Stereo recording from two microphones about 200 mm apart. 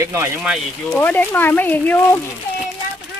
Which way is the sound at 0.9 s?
10° left (ahead or behind).